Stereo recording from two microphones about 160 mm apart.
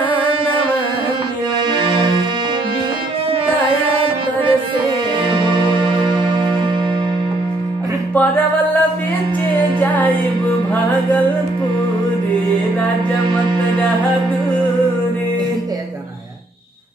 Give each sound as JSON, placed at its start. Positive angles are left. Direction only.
{"t": 0.1, "sound": "music", "side_deg": -35}
{"t": 1.7, "sound": "music", "side_deg": -30}
{"t": 3.9, "sound": "music", "side_deg": -35}
{"t": 9.8, "sound": "music", "side_deg": 10}